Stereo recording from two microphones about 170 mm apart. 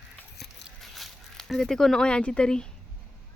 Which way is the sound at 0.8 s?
Centre (ahead or behind).